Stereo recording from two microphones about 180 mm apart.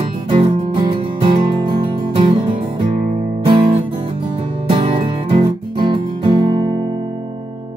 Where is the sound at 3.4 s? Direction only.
30° right (ahead or behind).